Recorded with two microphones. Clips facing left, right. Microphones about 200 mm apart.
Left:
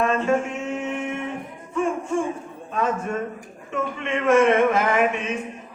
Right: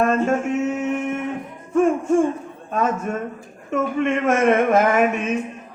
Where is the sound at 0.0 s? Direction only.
45° right (ahead or behind).